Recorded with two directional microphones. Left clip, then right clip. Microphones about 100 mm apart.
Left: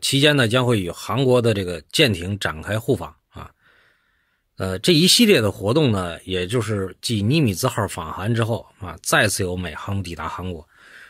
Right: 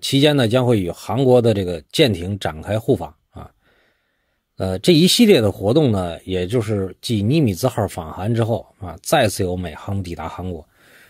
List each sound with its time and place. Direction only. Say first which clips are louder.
0.0 s speech: right 1 dB; 35° right (ahead or behind)
4.6 s speech: right 3 dB; 35° right (ahead or behind)
10.8 s a sound: left 4 dB; 35° right (ahead or behind)